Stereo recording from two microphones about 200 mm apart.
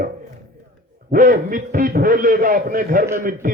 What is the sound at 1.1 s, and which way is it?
A man's voice, 45° right (ahead or behind).